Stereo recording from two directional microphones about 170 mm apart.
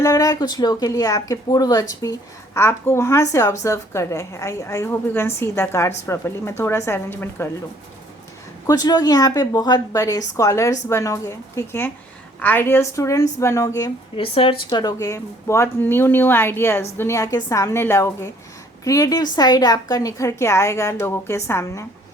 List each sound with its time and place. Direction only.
0.0 s a woman's voice: 20° left (ahead or behind)
8.6 s a woman's voice: 20° left (ahead or behind)
14.2 s speech: 35° left (ahead or behind); by 21.8 s 15° left (ahead or behind)